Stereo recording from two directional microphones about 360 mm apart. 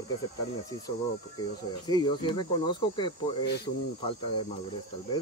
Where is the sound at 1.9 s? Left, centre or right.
Centre.